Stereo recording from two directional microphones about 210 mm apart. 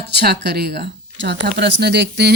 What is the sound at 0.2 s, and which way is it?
Speech, 50° right (ahead or behind).